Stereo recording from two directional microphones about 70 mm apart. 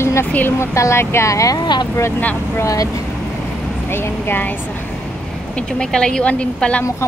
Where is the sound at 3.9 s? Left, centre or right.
Left.